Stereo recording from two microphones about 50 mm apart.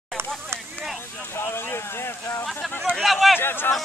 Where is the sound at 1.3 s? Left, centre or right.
Left.